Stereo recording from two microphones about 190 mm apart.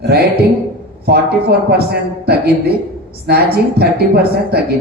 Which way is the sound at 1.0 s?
55° right (ahead or behind).